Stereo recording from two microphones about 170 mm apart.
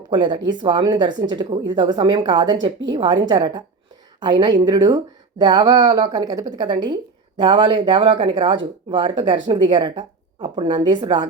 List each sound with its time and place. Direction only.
0.1 s speech: 25° right (ahead or behind)